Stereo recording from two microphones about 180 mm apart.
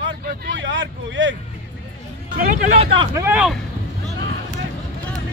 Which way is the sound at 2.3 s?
50° right (ahead or behind).